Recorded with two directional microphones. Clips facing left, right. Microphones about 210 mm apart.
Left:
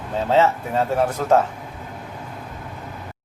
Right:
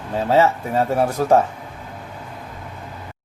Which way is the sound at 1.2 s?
15° right (ahead or behind).